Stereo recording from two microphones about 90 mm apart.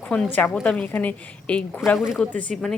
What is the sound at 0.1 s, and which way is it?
Speech, 15° left (ahead or behind).